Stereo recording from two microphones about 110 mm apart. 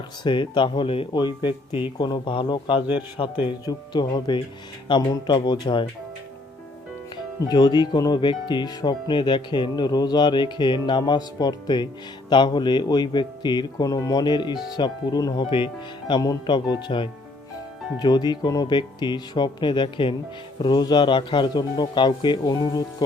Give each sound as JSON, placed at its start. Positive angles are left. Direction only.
{"t": 0.2, "sound": "speech", "side_deg": 45}
{"t": 1.1, "sound": "speech", "side_deg": 40}
{"t": 7.4, "sound": "speech", "side_deg": 40}